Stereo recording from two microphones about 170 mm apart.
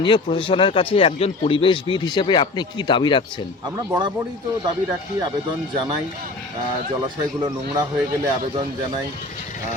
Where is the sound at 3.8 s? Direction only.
25° right (ahead or behind).